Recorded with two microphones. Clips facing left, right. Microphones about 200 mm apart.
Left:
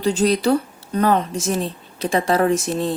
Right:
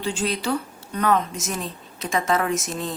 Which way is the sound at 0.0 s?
40° left (ahead or behind).